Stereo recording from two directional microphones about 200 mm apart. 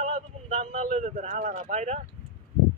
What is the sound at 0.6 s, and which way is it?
Speech, 35° right (ahead or behind).